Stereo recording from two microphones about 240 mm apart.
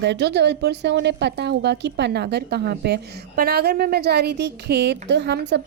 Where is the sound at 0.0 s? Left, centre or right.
Right.